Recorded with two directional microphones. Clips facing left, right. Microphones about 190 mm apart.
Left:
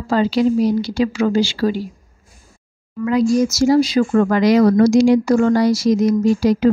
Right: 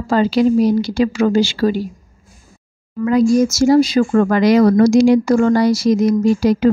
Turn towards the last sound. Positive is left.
turn(degrees=-60)  # may be behind; listen again after turning